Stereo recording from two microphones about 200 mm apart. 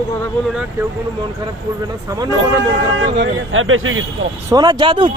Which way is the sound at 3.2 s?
80° right.